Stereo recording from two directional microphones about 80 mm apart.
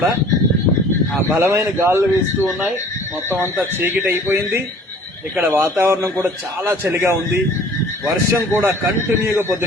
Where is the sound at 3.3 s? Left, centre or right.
Right.